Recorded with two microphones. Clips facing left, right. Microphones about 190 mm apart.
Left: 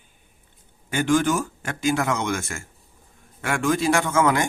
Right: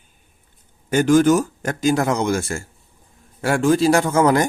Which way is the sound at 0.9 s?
40° right (ahead or behind).